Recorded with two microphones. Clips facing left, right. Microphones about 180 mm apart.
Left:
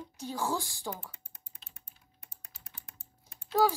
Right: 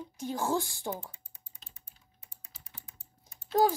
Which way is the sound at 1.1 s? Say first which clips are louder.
Left 1 dB; 55° left (ahead or behind).